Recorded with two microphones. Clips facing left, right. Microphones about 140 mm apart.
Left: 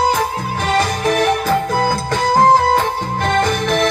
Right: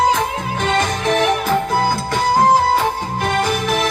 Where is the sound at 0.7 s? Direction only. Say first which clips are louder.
Left 2 dB; 40° left (ahead or behind).